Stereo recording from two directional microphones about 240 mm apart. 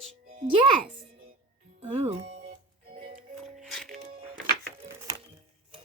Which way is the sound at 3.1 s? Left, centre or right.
Right.